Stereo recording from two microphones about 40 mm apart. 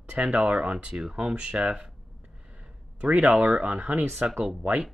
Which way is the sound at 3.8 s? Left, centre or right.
Right.